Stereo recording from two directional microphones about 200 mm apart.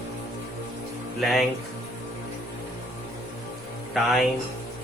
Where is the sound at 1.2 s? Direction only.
Centre (ahead or behind).